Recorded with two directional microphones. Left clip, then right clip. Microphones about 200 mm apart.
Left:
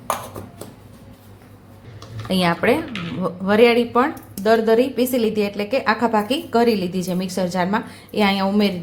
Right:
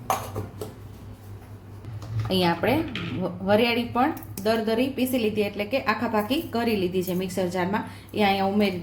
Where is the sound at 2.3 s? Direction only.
20° left (ahead or behind).